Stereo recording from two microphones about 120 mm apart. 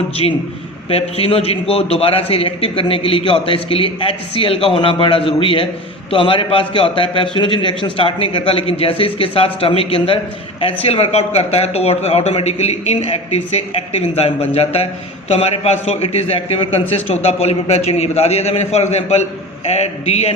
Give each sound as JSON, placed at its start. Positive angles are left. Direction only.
{"t": 0.2, "sound": "a man's voice", "side_deg": 45}